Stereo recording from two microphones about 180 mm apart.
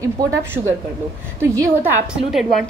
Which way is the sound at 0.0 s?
15° right (ahead or behind).